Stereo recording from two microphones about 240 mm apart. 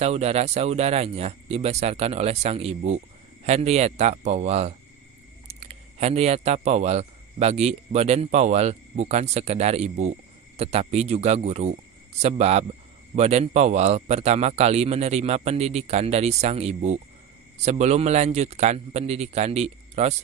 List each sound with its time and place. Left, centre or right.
0.0 s a man's voice: right